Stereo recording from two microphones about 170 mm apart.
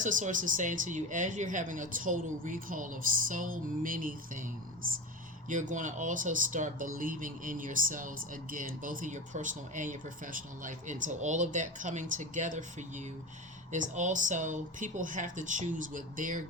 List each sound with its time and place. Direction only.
0.0 s speech: 50° right (ahead or behind)